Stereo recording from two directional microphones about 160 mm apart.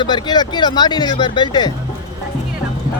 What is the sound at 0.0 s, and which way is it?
Speech, 30° left (ahead or behind).